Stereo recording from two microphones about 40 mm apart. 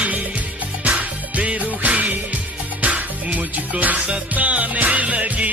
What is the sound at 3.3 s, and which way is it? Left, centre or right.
Music, right.